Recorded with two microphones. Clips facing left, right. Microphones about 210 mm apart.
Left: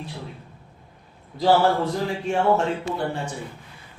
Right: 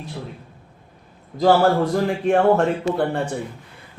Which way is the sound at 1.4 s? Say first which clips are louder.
Right 3 dB; 50° right (ahead or behind).